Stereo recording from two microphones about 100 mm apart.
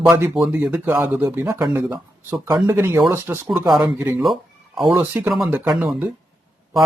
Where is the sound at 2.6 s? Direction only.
20° right (ahead or behind).